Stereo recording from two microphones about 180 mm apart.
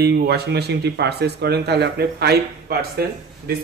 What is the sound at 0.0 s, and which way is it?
Speech, 65° right (ahead or behind).